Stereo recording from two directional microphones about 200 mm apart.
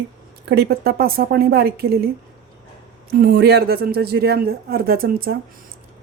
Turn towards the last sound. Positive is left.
turn(degrees=-50)  # may be behind; listen again after turning